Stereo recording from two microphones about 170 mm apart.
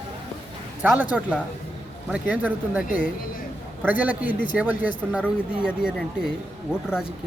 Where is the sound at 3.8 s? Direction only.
10° right (ahead or behind).